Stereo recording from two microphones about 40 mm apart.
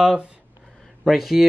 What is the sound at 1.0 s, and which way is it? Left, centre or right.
Speech, centre.